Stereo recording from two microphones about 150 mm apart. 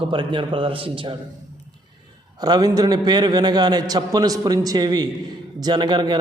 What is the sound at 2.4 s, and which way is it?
A man's voice, 25° right (ahead or behind).